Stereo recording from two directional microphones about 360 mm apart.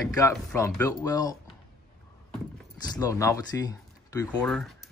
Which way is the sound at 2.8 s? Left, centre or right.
Centre.